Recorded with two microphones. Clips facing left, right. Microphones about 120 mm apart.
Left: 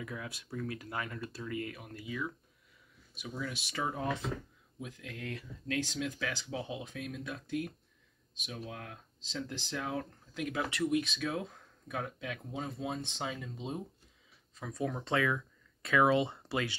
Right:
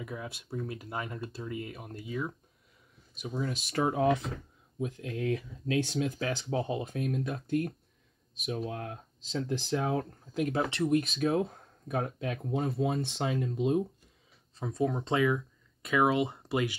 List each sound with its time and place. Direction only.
0.0 s speech: 25° right (ahead or behind); by 4.3 s 70° right (ahead or behind)
4.7 s speech: 45° right (ahead or behind); by 13.8 s 65° right (ahead or behind)
14.6 s speech: 25° right (ahead or behind)